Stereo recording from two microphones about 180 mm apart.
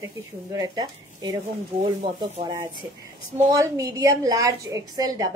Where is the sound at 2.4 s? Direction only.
20° right (ahead or behind).